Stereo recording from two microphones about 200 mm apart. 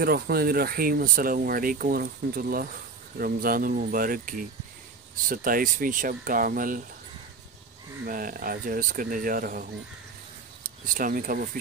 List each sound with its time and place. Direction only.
0.0 s speech: 50° right (ahead or behind)
8.1 s speech: 45° right (ahead or behind)